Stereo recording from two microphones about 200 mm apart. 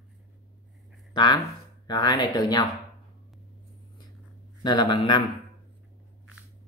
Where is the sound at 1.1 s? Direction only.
20° left (ahead or behind).